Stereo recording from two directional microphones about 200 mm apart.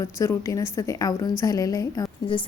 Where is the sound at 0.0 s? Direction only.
15° left (ahead or behind).